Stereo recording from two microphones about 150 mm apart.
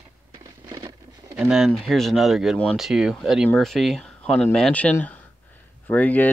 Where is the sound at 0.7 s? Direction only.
30° right (ahead or behind).